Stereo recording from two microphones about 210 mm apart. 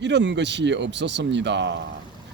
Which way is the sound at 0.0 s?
55° right (ahead or behind).